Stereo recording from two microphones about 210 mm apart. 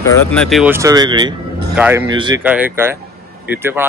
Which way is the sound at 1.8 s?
10° right (ahead or behind).